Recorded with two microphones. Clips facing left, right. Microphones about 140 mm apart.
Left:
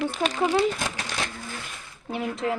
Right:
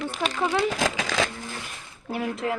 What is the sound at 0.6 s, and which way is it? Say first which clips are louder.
Speech: even; 90° right.